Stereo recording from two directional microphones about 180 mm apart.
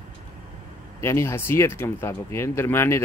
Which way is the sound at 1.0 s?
15° left (ahead or behind).